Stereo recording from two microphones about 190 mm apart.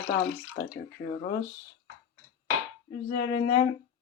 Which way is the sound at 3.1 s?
50° left (ahead or behind).